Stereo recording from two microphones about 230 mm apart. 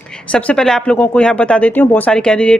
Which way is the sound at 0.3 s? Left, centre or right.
Centre.